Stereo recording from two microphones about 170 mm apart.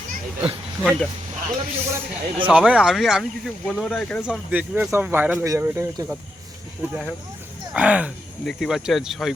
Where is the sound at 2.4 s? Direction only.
5° right (ahead or behind).